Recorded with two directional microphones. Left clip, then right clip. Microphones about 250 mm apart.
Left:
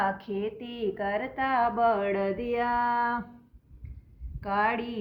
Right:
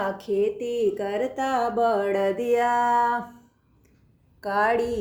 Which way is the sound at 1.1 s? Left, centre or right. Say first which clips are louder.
Right 3 dB; left.